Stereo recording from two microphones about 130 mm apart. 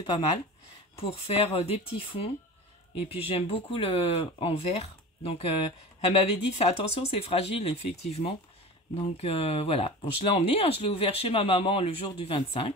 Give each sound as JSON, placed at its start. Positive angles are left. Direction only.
{"t": 0.9, "sound": "speech", "side_deg": 50}